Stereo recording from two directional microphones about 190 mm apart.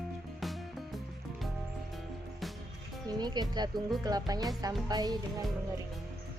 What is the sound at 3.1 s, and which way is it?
Speech, 20° right (ahead or behind).